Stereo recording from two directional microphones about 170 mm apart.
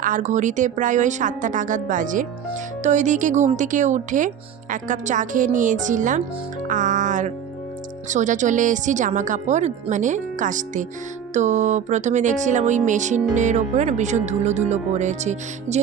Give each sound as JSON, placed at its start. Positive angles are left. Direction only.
{"t": 0.0, "sound": "speech", "side_deg": -50}